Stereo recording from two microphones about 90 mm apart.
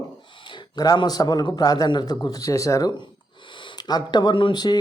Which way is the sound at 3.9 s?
50° left (ahead or behind).